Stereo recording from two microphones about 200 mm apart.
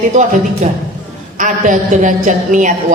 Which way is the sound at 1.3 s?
40° right (ahead or behind).